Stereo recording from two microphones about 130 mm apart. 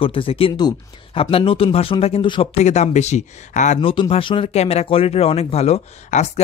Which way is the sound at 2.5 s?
60° left (ahead or behind).